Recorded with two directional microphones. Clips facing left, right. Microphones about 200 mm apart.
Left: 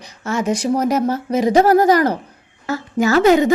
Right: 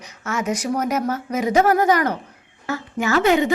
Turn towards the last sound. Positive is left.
turn(degrees=40)  # may be behind; listen again after turning